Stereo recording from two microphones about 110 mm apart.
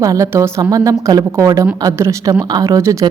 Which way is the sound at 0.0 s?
30° right (ahead or behind).